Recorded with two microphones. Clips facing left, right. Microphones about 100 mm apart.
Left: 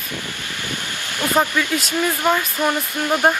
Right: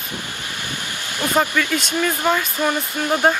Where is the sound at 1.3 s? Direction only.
15° left (ahead or behind).